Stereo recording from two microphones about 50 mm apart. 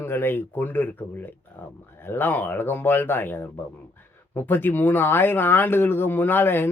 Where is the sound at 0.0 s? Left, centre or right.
Left.